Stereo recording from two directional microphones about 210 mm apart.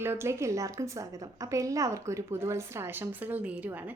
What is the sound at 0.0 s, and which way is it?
A woman's voice, 10° right (ahead or behind).